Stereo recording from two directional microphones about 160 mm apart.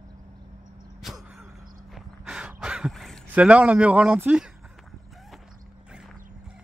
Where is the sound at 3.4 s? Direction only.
10° right (ahead or behind).